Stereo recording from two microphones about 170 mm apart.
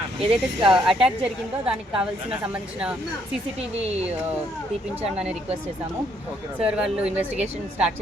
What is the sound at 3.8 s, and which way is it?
Speech, 40° right (ahead or behind).